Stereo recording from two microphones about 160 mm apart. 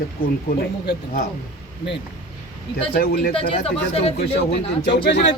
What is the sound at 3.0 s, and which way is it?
Speech, 70° left (ahead or behind).